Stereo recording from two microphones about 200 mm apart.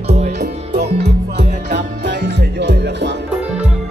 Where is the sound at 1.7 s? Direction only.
60° right (ahead or behind).